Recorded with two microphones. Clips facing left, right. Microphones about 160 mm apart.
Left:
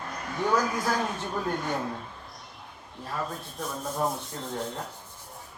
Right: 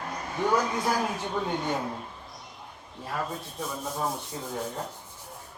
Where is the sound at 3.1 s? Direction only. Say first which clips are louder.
Right 1 dB; 10° right (ahead or behind).